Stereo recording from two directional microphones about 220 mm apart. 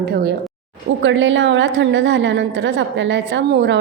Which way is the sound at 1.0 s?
60° right (ahead or behind).